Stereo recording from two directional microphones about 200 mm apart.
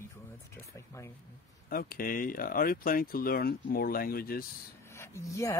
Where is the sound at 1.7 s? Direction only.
45° left (ahead or behind).